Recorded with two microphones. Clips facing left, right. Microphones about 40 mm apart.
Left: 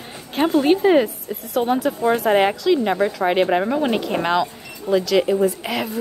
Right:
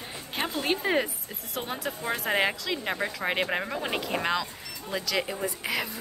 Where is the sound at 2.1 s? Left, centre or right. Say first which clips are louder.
Left 7 dB; centre.